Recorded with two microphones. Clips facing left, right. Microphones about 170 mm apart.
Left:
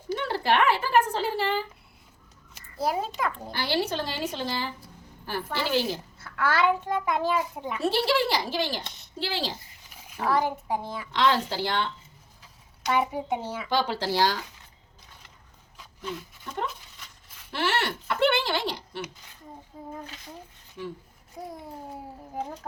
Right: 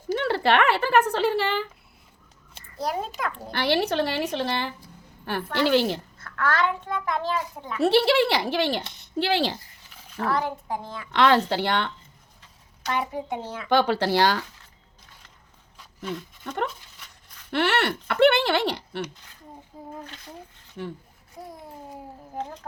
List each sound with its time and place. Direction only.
0.3 s a woman's voice: 70° right (ahead or behind)
2.7 s a child's voice: 5° left (ahead or behind)
3.5 s speech: 65° right (ahead or behind)
6.1 s a child's voice: 5° left (ahead or behind)
7.8 s speech: 65° right (ahead or behind)
10.2 s a child's voice: 10° left (ahead or behind)
11.1 s speech: 65° right (ahead or behind)
12.8 s a child's voice: 10° left (ahead or behind)
13.7 s speech: 65° right (ahead or behind)
17.5 s speech: 60° right (ahead or behind)
19.7 s a child's voice: centre (ahead or behind)
21.4 s a child's voice: centre (ahead or behind)